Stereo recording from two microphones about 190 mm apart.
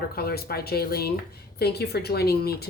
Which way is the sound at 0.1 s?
55° left (ahead or behind).